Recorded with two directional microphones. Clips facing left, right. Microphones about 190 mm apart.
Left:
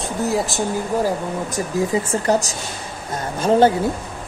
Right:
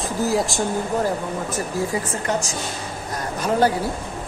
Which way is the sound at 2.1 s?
35° left (ahead or behind).